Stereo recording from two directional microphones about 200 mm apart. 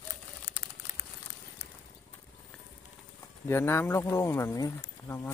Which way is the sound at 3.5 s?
10° left (ahead or behind).